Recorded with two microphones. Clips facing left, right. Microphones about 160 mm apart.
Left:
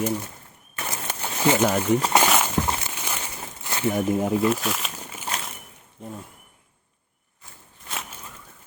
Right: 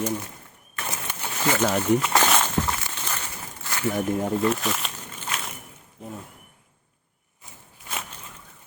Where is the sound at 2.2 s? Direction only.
5° left (ahead or behind).